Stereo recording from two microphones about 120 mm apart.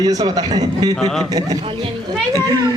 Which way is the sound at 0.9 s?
Centre (ahead or behind).